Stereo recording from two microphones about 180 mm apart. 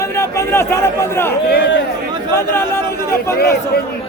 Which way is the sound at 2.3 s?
15° left (ahead or behind).